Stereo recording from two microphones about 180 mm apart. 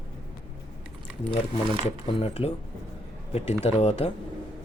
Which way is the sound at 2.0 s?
35° left (ahead or behind).